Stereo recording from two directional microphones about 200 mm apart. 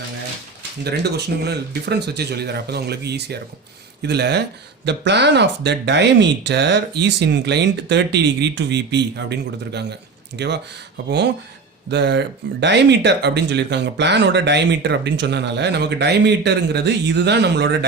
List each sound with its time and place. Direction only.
0.9 s speech: 55° right (ahead or behind)
11.9 s speech: 60° right (ahead or behind)